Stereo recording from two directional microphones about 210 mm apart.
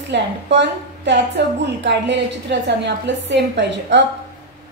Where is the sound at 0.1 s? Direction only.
55° right (ahead or behind).